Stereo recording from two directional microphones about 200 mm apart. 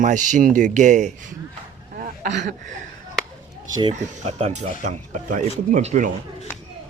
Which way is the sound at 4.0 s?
35° right (ahead or behind).